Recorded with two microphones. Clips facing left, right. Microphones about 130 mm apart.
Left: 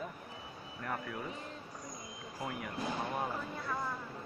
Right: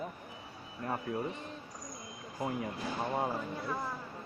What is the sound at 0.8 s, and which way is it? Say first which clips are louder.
Speech: right 5 dB; 25° right (ahead or behind).